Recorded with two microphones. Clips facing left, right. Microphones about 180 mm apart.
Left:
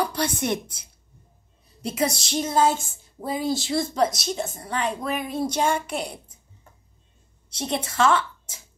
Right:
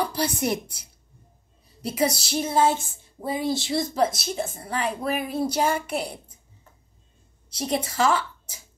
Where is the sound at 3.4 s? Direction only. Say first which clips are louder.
Left 1 dB; 30° right (ahead or behind).